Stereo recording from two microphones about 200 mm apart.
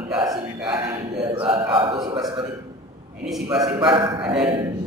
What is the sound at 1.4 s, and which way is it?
A man's voice, 20° right (ahead or behind).